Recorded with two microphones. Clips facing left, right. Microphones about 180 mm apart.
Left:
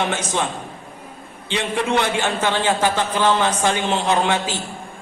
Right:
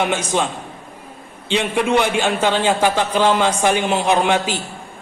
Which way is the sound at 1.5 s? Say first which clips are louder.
Right 3 dB; 15° right (ahead or behind).